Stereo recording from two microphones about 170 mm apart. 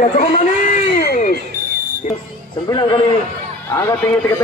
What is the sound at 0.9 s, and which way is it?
Music, 60° left (ahead or behind).